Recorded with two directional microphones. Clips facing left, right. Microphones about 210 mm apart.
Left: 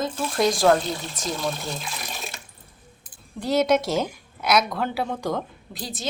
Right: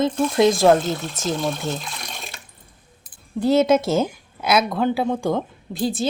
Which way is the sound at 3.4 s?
25° right (ahead or behind).